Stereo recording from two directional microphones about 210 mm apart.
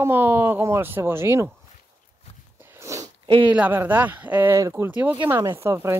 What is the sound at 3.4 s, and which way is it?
Speech, 5° right (ahead or behind).